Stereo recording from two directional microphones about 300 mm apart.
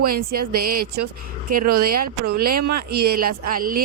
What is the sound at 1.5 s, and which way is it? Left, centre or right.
Speech, right.